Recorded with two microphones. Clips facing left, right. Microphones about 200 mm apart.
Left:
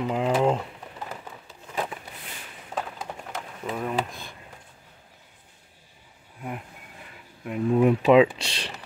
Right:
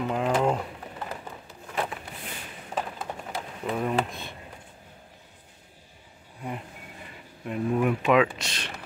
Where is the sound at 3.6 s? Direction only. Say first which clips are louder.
Right 2 dB; 5° right (ahead or behind).